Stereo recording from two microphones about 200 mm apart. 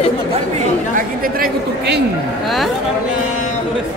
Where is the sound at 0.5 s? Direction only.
45° right (ahead or behind).